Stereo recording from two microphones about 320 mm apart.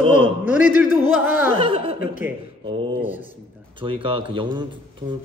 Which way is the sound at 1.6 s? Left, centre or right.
Centre.